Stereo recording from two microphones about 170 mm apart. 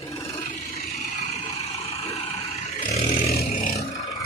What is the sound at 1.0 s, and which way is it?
Vehicle, 45° left (ahead or behind).